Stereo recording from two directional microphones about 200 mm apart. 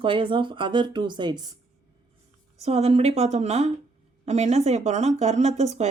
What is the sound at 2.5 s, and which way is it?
Speech, 30° right (ahead or behind).